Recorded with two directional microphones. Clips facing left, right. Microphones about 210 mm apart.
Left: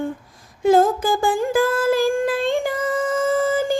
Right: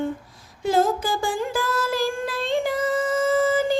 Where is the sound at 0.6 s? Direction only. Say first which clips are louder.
Left 5 dB; 50° left (ahead or behind).